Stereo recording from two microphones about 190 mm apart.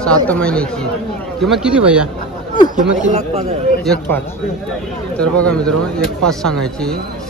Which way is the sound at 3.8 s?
5° left (ahead or behind).